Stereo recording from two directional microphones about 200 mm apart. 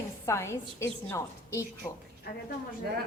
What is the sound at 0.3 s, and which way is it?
A woman's voice, 15° left (ahead or behind).